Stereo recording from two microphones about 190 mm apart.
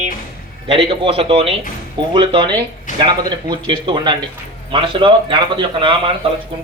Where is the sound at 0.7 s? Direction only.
30° right (ahead or behind).